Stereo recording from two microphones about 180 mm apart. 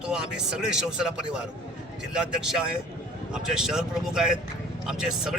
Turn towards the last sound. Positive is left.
turn(degrees=0)  # may be behind; listen again after turning